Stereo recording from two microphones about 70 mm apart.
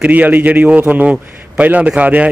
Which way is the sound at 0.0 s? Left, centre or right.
Right.